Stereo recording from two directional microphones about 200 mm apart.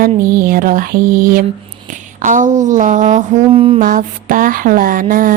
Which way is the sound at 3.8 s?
40° right (ahead or behind).